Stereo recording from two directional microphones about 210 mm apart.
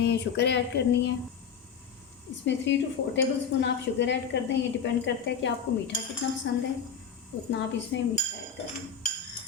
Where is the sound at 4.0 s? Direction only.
55° left (ahead or behind).